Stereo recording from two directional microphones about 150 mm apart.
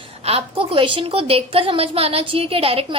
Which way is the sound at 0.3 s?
40° right (ahead or behind).